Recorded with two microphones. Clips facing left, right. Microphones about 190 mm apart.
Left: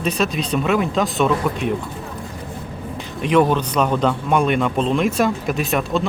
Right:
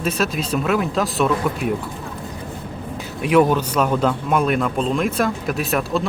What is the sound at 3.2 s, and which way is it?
A man's voice, 10° right (ahead or behind).